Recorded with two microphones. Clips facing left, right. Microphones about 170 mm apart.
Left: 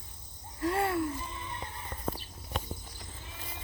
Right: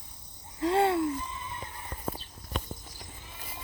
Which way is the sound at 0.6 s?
25° right (ahead or behind).